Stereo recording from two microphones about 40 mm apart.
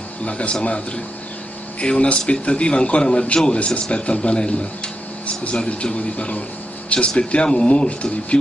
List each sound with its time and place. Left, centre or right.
0.2 s speech: left
3.5 s a man's voice: left
5.2 s a man's voice: left